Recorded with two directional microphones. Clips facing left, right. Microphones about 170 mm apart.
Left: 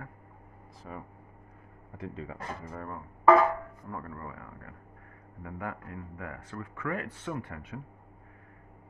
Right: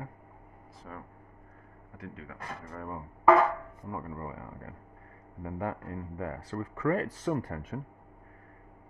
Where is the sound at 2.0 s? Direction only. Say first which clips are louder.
Left 5 dB; 25° left (ahead or behind).